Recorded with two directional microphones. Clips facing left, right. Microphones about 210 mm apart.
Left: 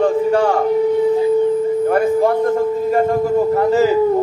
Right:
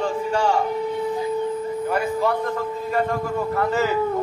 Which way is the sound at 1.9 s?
50° left (ahead or behind).